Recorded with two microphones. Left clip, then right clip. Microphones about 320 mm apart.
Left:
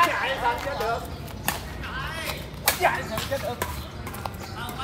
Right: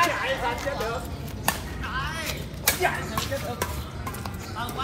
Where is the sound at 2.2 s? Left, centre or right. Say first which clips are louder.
Left 1 dB; centre.